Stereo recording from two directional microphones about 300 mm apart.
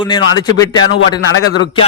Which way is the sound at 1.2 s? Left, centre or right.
Left.